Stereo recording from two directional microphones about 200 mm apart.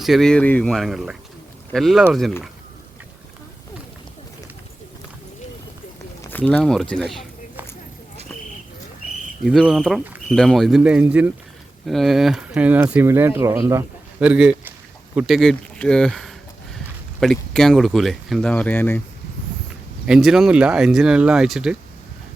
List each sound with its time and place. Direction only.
0.0 s speech: centre (ahead or behind)
6.3 s speech: 5° left (ahead or behind)
9.4 s speech: centre (ahead or behind)
20.1 s speech: centre (ahead or behind)